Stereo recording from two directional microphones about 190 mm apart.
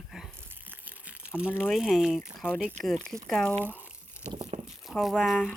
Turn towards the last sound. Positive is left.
turn(degrees=0)  # may be behind; listen again after turning